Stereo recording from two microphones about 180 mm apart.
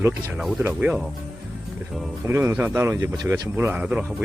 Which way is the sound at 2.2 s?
15° right (ahead or behind).